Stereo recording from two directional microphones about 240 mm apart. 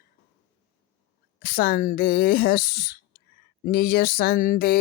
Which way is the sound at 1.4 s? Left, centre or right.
Left.